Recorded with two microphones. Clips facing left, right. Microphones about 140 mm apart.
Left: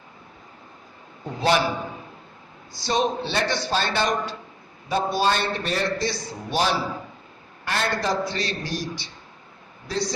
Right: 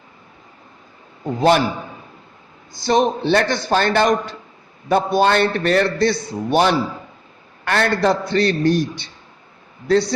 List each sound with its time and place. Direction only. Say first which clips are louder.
1.4 s a man's voice: right 6 dB; 50° right (ahead or behind)
2.7 s a man's voice: right 6 dB; 55° right (ahead or behind)